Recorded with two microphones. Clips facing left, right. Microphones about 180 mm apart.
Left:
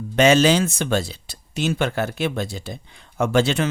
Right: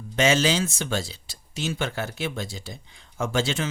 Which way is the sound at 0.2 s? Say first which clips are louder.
Left 6 dB; 60° left (ahead or behind).